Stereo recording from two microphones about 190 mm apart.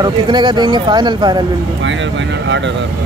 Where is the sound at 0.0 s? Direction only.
25° right (ahead or behind).